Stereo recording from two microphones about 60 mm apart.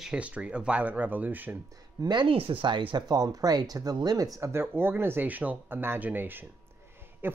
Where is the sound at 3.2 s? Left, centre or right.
Right.